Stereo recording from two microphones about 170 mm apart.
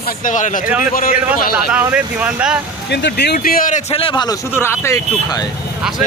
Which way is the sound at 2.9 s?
85° left.